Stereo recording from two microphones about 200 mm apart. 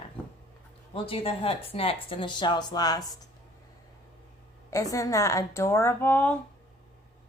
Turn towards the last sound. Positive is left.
turn(degrees=10)  # may be behind; listen again after turning